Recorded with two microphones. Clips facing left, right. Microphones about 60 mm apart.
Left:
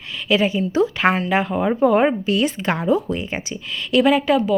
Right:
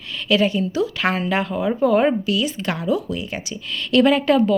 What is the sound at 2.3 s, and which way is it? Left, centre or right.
Speech, left.